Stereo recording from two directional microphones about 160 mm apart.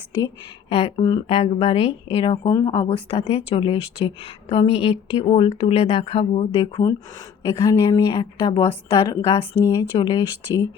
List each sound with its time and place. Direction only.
0.7 s a woman's voice: 40° left (ahead or behind)